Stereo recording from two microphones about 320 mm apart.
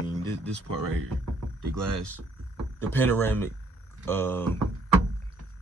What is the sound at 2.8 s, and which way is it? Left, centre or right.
Speech, centre.